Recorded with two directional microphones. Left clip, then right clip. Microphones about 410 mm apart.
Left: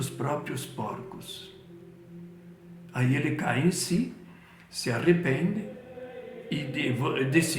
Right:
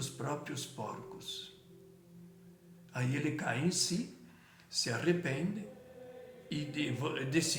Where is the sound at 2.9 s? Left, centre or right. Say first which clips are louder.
Left 8 dB; right.